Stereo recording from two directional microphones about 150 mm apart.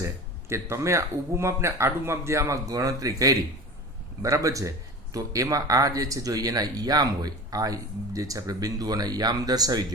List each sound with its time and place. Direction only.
0.0 s speech: 20° right (ahead or behind)